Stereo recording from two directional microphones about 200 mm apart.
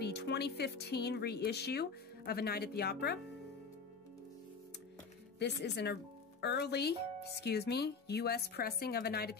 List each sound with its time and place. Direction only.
0.0 s speech: 55° left (ahead or behind)
5.4 s speech: 55° left (ahead or behind)